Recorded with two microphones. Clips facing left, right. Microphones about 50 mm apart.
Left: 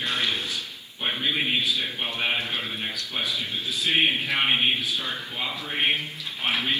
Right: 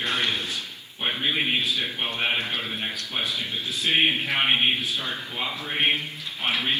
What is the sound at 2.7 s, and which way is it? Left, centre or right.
Speech, centre.